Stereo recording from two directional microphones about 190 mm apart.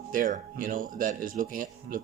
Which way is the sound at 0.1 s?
45° right (ahead or behind).